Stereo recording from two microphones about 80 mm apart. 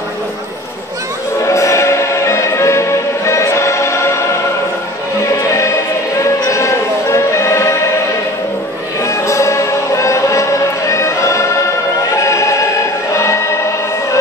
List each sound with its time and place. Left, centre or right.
1.4 s music: left
9.0 s music: left
13.1 s choir: left